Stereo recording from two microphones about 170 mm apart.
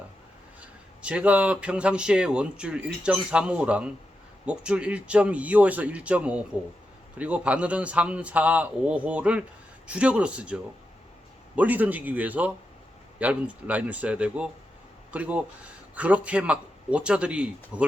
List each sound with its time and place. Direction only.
0.6 s speech: 5° right (ahead or behind)